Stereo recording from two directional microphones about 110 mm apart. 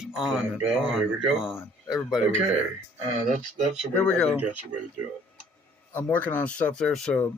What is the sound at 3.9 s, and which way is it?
Speech, 15° left (ahead or behind).